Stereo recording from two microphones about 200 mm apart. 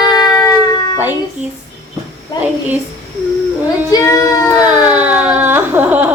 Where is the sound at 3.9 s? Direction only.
15° left (ahead or behind).